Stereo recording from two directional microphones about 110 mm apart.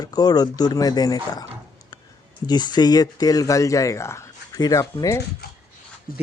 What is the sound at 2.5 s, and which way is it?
Speech, 40° left (ahead or behind).